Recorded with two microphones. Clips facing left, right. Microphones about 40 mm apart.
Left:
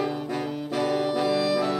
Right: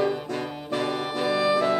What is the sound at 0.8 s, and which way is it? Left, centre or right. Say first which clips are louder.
Music: left 3 dB; centre.